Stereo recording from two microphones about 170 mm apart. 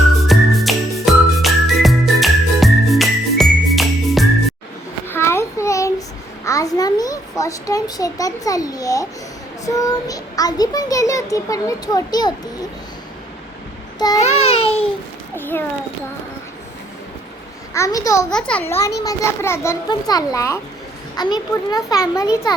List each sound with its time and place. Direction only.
0.3 s music: centre (ahead or behind)
5.0 s a sound: 15° left (ahead or behind)
9.6 s a child's voice: 20° left (ahead or behind)
14.2 s a sound: 40° left (ahead or behind)
15.4 s a child's voice: 10° left (ahead or behind)
17.7 s a child's voice: 20° left (ahead or behind)
18.3 s a child's voice: 5° left (ahead or behind)
18.7 s a child's voice: 15° left (ahead or behind)